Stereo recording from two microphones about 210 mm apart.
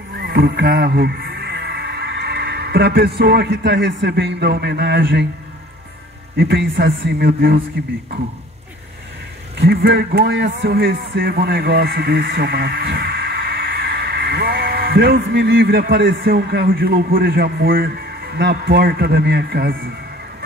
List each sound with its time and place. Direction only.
0.2 s speech: 45° right (ahead or behind)
6.3 s a man's voice: 50° right (ahead or behind)
9.6 s a man's voice: 50° right (ahead or behind)